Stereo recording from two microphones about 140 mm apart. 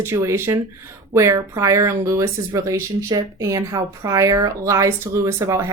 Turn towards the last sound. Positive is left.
turn(degrees=-20)  # may be behind; listen again after turning